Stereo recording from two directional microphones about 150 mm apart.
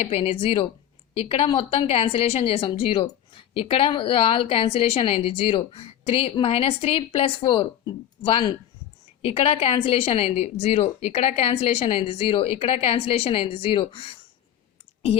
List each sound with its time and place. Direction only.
0.0 s a woman's voice: 40° left (ahead or behind)